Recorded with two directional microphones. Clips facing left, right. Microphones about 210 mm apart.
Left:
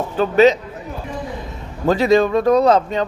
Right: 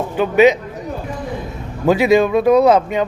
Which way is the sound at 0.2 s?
10° right (ahead or behind).